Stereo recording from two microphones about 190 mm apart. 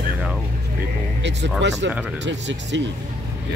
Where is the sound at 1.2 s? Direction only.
65° right (ahead or behind).